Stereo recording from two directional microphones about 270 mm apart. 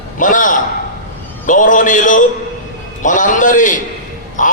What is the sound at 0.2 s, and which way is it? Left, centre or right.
A man's voice, left.